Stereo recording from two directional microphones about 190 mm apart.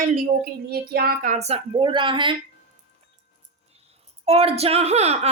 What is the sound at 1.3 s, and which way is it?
Speech, 35° right (ahead or behind).